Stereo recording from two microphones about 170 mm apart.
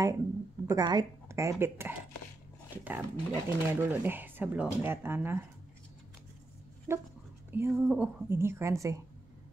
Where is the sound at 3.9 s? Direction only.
10° right (ahead or behind).